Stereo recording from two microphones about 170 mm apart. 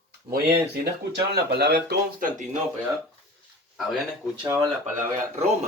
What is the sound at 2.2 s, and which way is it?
Speech, 50° right (ahead or behind).